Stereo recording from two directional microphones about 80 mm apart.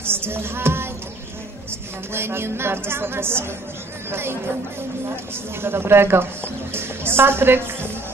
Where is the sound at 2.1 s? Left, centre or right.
Right.